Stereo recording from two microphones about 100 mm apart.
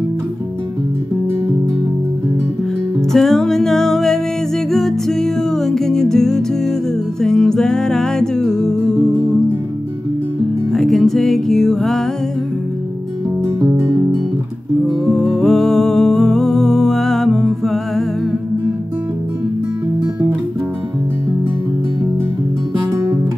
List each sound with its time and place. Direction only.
3.0 s music: 5° left (ahead or behind)
10.7 s music: centre (ahead or behind)
13.4 s music: 25° right (ahead or behind)
15.0 s music: 5° left (ahead or behind)